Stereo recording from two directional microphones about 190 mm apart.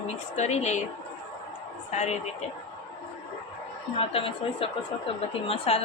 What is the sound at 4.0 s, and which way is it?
A woman's voice, 30° left (ahead or behind).